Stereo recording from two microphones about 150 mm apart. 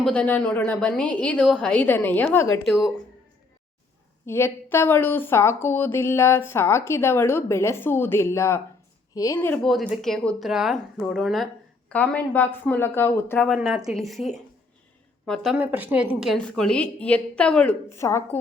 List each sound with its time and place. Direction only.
0.0 s a woman's voice: 5° left (ahead or behind)
2.6 s a woman's voice: centre (ahead or behind)
4.3 s a woman's voice: 15° left (ahead or behind)
9.6 s a woman's voice: centre (ahead or behind)
13.5 s a woman's voice: centre (ahead or behind)
15.3 s a woman's voice: centre (ahead or behind)
15.5 s a woman's voice: 10° right (ahead or behind)
16.5 s a woman's voice: 5° left (ahead or behind)